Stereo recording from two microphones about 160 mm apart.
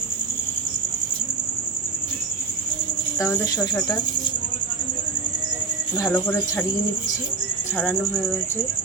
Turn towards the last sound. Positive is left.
turn(degrees=10)  # may be behind; listen again after turning